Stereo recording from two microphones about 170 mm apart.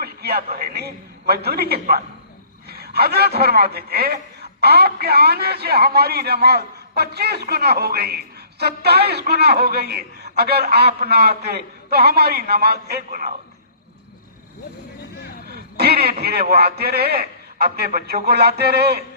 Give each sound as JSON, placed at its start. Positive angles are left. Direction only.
{"t": 0.0, "sound": "a man's voice", "side_deg": -65}
{"t": 15.1, "sound": "a sound", "side_deg": 70}
{"t": 15.5, "sound": "a man's voice", "side_deg": -70}